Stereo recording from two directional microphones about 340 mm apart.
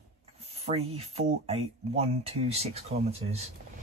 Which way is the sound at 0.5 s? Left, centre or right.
Centre.